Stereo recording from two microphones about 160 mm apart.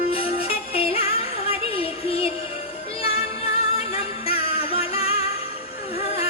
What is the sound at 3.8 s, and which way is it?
Music, 35° left (ahead or behind).